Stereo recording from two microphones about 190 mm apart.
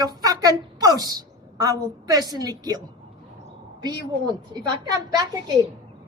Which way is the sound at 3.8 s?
20° right (ahead or behind).